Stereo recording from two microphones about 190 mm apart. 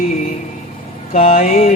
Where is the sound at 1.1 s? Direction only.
45° left (ahead or behind).